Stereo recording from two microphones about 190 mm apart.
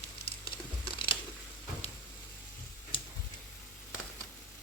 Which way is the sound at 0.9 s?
25° left (ahead or behind).